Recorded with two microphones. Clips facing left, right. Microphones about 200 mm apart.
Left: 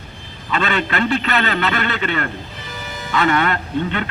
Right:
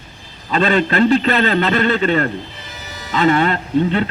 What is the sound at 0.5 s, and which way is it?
A man's voice, 35° right (ahead or behind).